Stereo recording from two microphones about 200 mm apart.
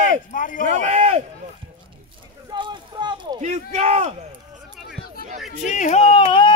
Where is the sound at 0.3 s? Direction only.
40° left (ahead or behind).